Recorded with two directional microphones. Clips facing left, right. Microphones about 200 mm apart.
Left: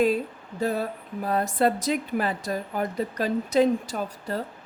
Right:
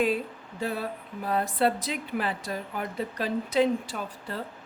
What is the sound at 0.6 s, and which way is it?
Speech, 40° left (ahead or behind).